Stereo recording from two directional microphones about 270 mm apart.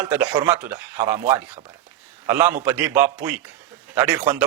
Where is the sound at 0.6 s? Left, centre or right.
Centre.